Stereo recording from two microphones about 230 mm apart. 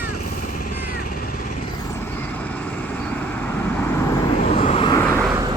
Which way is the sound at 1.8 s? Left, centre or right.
Centre.